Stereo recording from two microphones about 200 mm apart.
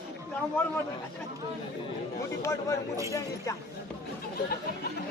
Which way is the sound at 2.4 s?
15° left (ahead or behind).